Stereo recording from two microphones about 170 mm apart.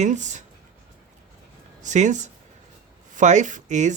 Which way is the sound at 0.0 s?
45° right (ahead or behind).